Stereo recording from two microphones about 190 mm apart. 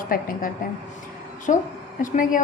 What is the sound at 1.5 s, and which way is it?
Speech, 45° left (ahead or behind).